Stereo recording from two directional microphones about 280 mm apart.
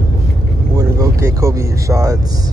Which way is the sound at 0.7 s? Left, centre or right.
Centre.